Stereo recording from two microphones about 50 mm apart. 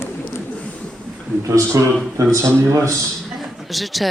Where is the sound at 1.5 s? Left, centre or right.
Right.